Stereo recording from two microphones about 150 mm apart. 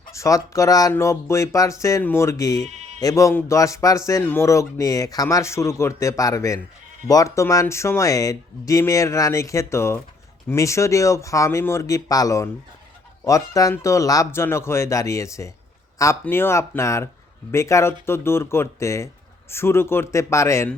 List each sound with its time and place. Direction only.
0.1 s speech: 20° left (ahead or behind)